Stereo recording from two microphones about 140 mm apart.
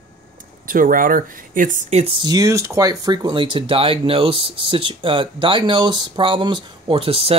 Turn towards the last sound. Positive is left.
turn(degrees=-40)  # may be behind; listen again after turning